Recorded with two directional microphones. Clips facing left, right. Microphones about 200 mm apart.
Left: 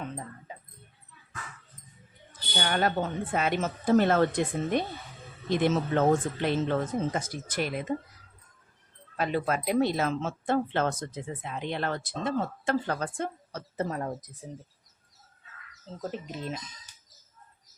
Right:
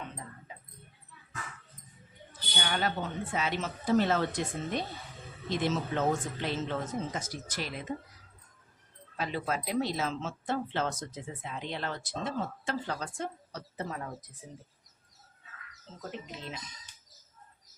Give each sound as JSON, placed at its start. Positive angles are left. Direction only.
{"t": 2.6, "sound": "speech", "side_deg": 50}
{"t": 9.1, "sound": "speech", "side_deg": 55}
{"t": 16.0, "sound": "speech", "side_deg": 45}